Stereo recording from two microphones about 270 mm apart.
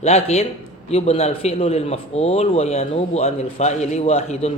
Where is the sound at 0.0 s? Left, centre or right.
Left.